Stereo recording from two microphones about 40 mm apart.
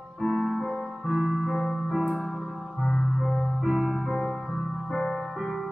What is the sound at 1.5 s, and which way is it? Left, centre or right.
Music, centre.